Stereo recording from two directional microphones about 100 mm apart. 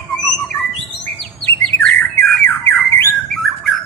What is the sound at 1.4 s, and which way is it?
Bird, 15° left (ahead or behind).